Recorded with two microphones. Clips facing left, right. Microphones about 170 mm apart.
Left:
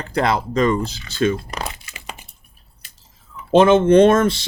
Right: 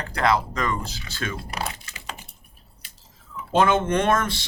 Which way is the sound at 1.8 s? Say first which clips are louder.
Left 2 dB; 15° left (ahead or behind).